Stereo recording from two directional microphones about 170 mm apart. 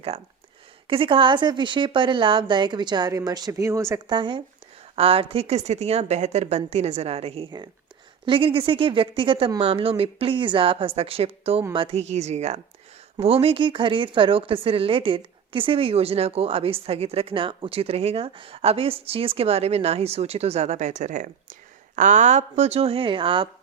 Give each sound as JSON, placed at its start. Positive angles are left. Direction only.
{"t": 0.9, "sound": "a woman's voice", "side_deg": -30}